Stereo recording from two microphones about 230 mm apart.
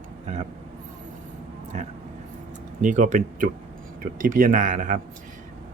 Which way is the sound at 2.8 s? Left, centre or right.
Right.